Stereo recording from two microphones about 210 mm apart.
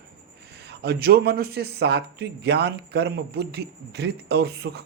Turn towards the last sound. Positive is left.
turn(degrees=-50)  # may be behind; listen again after turning